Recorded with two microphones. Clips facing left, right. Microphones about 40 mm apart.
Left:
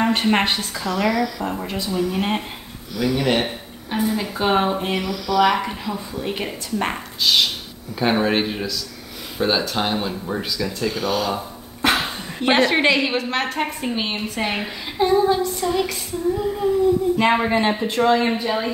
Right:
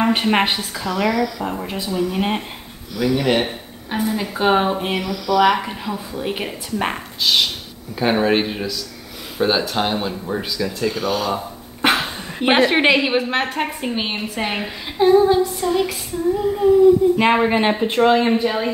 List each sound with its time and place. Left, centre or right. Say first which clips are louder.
0.0 s a woman's voice: right 1 dB; centre
11.8 s a sound: right 2 dB; right
12.4 s a woman's voice: right 2 dB; right; by 16.0 s centre
17.2 s a woman's voice: right 2 dB; centre
18.2 s a woman's voice: right 3 dB; centre